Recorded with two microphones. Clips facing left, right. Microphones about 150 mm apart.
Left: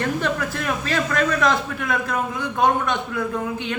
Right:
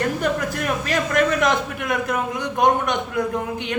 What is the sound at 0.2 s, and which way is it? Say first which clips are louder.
A man's voice: right 2 dB; 15° right (ahead or behind).